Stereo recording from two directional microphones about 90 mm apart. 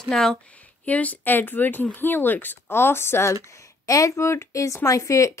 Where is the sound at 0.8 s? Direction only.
15° left (ahead or behind).